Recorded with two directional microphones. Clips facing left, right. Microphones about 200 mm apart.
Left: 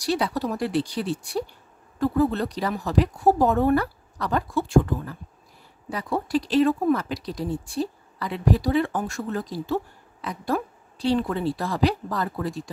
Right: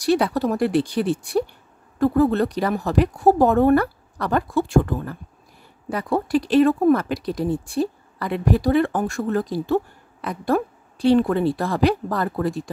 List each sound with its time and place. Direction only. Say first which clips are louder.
0.0 s speech: right 5 dB; 55° right (ahead or behind)